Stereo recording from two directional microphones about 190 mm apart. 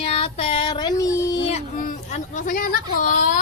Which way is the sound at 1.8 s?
40° left (ahead or behind).